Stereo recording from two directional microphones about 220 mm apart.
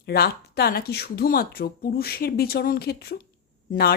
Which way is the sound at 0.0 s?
45° left (ahead or behind).